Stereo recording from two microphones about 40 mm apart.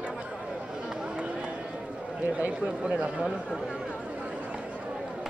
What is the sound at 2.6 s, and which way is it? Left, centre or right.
Speech, right.